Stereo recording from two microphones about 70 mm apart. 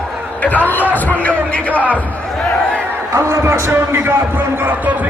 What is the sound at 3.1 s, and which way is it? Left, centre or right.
Speech, right.